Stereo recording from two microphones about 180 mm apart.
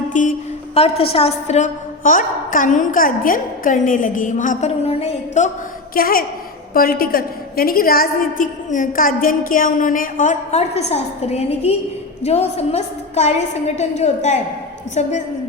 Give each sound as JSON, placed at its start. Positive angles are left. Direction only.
{"t": 0.1, "sound": "a woman's voice", "side_deg": 45}
{"t": 5.9, "sound": "a woman's voice", "side_deg": 55}